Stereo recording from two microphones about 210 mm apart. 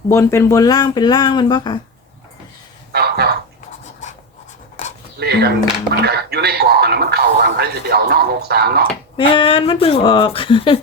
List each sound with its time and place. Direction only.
0.1 s speech: 15° left (ahead or behind)
2.9 s a sound: 50° right (ahead or behind)
4.8 s pant: 35° left (ahead or behind)
5.2 s speech: 50° right (ahead or behind)
9.1 s speech: 25° left (ahead or behind)